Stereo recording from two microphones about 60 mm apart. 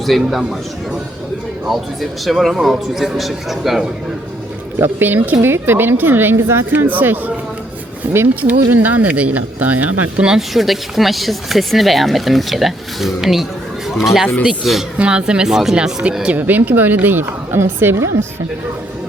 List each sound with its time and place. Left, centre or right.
0.0 s speech: centre
1.6 s speech: centre
4.8 s speech: right
6.7 s speech: right
8.1 s speech: right
8.7 s speech: right
10.2 s speech: centre
14.9 s speech: centre
16.2 s speech: right
17.9 s speech: right